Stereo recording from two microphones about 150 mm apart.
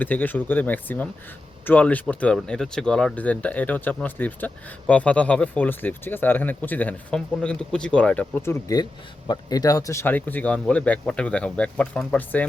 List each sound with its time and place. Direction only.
0.0 s speech: 10° left (ahead or behind)